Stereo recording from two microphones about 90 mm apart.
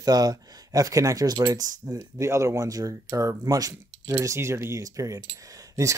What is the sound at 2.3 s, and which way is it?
Speech, 30° right (ahead or behind).